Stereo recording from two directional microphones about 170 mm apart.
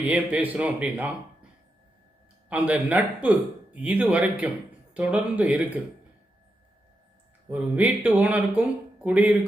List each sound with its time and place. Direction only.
0.0 s a man's voice: 10° right (ahead or behind)
2.5 s a man's voice: 10° right (ahead or behind)
7.5 s a man's voice: 10° right (ahead or behind)